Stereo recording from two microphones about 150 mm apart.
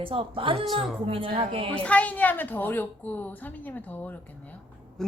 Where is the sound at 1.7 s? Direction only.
10° left (ahead or behind).